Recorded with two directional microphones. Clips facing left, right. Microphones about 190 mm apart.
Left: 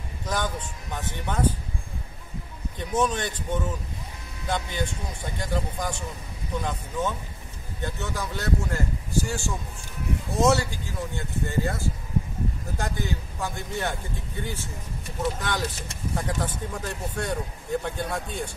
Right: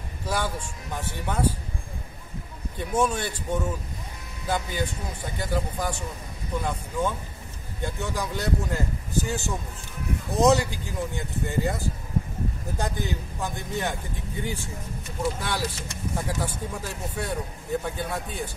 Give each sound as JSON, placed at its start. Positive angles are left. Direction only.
{"t": 0.3, "sound": "speech", "side_deg": -10}
{"t": 2.8, "sound": "speech", "side_deg": -10}